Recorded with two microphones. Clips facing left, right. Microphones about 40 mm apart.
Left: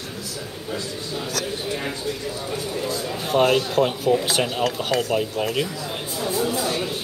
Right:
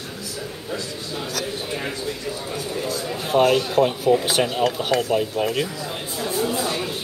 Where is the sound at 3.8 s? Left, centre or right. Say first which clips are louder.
Right 2 dB; centre.